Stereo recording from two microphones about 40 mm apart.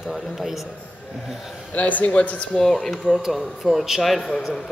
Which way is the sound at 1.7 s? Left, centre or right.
Left.